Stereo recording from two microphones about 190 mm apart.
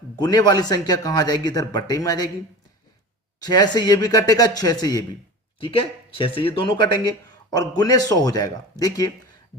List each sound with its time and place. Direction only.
0.2 s speech: 20° left (ahead or behind)
3.4 s speech: 20° left (ahead or behind)
5.5 s speech: 30° left (ahead or behind)